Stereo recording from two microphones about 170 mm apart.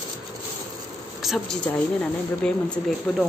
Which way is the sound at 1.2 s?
Centre (ahead or behind).